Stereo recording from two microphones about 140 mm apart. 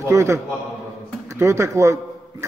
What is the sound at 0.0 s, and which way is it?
Speech, 20° right (ahead or behind).